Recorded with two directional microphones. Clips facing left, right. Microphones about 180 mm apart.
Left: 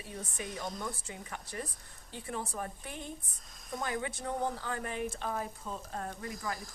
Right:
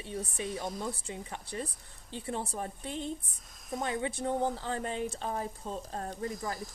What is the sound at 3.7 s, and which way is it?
Speech, 25° right (ahead or behind).